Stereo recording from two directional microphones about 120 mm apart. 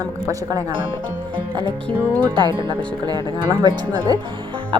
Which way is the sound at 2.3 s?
40° right (ahead or behind).